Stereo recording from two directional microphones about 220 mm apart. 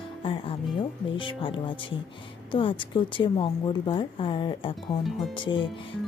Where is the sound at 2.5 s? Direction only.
25° left (ahead or behind).